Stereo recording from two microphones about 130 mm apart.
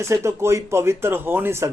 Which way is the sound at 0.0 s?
20° right (ahead or behind).